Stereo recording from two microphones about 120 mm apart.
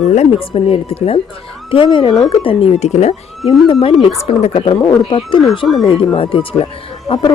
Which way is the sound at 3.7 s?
50° left (ahead or behind).